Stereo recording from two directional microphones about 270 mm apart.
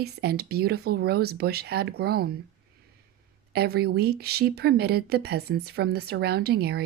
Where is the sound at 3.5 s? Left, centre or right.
Right.